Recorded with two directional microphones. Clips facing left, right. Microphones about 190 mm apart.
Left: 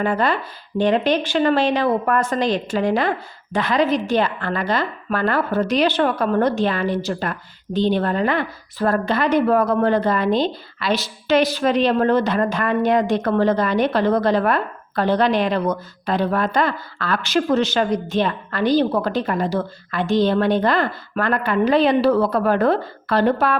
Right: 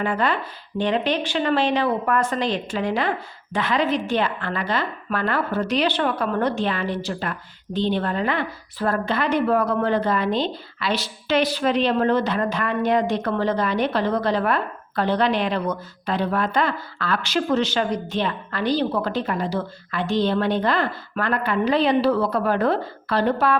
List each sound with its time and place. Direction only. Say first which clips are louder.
0.0 s a woman's voice: left 3 dB; 40° left (ahead or behind)